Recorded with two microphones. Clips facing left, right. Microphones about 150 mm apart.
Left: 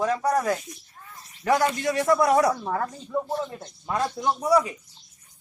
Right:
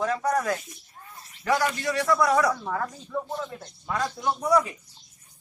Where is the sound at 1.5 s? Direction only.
20° left (ahead or behind).